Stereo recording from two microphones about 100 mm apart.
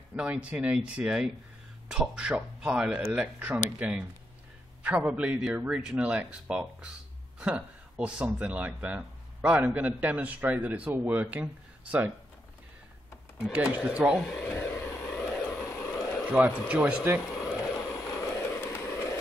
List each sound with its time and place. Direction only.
0.1 s speech: 15° right (ahead or behind)
13.4 s speech: 15° right (ahead or behind)
14.4 s vehicle: 25° left (ahead or behind)
15.7 s vehicle: 25° left (ahead or behind)
16.3 s speech: 15° right (ahead or behind)
17.2 s a sound: 5° left (ahead or behind)
17.5 s vehicle: centre (ahead or behind)
17.9 s vehicle: 30° left (ahead or behind)